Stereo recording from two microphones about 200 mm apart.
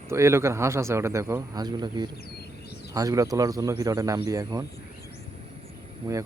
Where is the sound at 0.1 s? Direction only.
15° right (ahead or behind).